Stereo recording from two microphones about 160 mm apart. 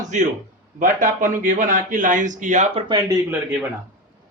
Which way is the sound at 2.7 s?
25° right (ahead or behind).